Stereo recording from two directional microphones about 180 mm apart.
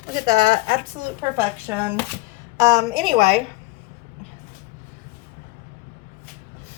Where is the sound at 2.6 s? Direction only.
25° right (ahead or behind).